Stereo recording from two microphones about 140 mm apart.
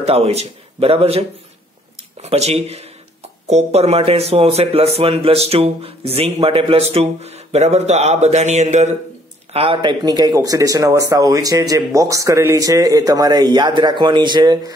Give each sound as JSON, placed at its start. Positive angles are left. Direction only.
{"t": 0.0, "sound": "speech", "side_deg": -45}
{"t": 2.2, "sound": "speech", "side_deg": -50}
{"t": 9.5, "sound": "speech", "side_deg": -40}